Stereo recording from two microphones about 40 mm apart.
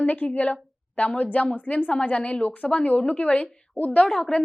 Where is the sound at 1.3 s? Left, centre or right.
Left.